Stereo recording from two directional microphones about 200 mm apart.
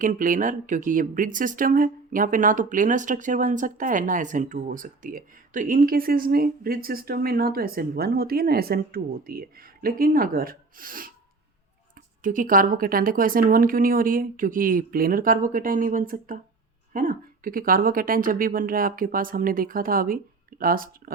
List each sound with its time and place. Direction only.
0.0 s speech: 40° right (ahead or behind)
12.2 s speech: 40° right (ahead or behind)